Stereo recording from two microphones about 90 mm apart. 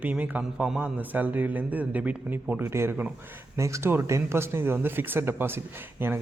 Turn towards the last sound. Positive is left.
turn(degrees=-25)  # may be behind; listen again after turning